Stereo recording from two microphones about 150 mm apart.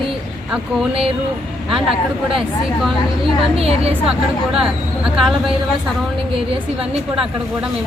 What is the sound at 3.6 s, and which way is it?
Speech, 40° right (ahead or behind).